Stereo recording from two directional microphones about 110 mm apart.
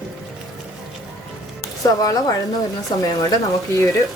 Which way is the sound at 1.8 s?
35° left (ahead or behind).